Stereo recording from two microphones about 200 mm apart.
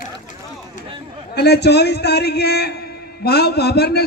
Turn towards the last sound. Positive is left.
turn(degrees=50)  # may be behind; listen again after turning